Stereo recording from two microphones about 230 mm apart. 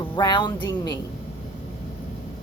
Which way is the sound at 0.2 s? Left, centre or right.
Centre.